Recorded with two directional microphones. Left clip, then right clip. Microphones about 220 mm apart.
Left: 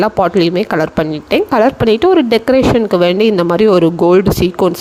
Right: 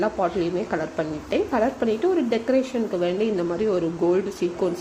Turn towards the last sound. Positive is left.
turn(degrees=40)  # may be behind; listen again after turning